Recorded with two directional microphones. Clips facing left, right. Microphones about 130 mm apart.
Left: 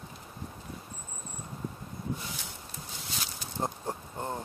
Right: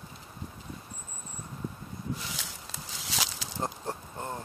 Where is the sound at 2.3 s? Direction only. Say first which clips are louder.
Right 1 dB; 90° right.